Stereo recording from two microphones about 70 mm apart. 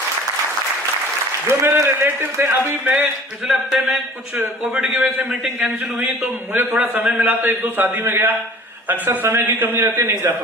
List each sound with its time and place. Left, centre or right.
1.5 s a man's voice: right
3.4 s speech: centre
4.7 s a man's voice: right
7.4 s a man's voice: right
9.5 s a man's voice: right